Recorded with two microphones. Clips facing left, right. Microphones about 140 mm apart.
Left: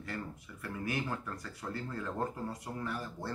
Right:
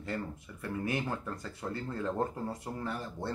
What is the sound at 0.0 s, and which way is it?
Speech, 25° right (ahead or behind).